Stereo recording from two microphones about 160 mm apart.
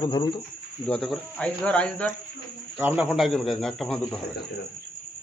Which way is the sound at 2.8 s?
10° right (ahead or behind).